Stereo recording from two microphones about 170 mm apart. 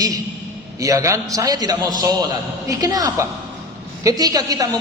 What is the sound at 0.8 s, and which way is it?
A man's voice, 20° right (ahead or behind).